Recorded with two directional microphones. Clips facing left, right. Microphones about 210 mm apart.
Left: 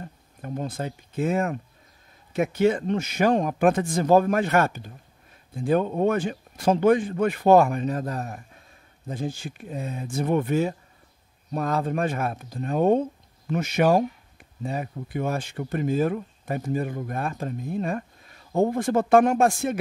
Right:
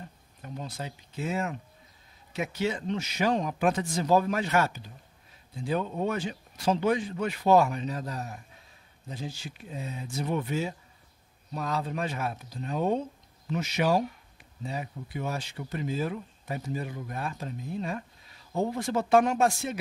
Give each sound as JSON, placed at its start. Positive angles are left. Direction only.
{"t": 0.0, "sound": "speech", "side_deg": 50}